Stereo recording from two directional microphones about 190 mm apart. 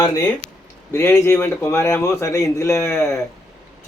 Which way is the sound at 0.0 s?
15° left (ahead or behind).